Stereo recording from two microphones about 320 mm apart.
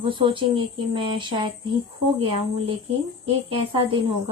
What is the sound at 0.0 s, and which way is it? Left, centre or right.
Speech, centre.